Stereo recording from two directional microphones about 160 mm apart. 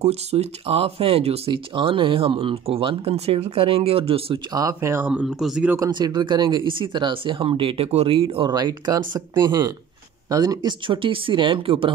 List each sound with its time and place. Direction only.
0.0 s speech: 40° right (ahead or behind)
4.6 s speech: 20° right (ahead or behind)
5.8 s speech: 25° right (ahead or behind)